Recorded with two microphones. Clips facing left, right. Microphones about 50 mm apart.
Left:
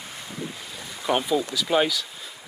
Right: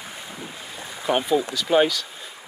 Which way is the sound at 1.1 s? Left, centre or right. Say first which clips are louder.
Right 2 dB; centre.